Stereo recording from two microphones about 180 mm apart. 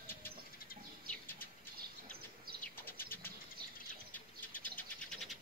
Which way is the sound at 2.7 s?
10° left (ahead or behind).